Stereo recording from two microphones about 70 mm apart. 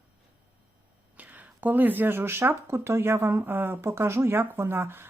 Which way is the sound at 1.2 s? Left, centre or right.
Right.